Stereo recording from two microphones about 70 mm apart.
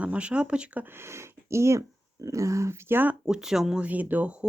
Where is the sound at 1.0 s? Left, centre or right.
Right.